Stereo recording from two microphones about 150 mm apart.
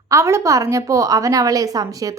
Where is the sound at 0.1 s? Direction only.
20° right (ahead or behind).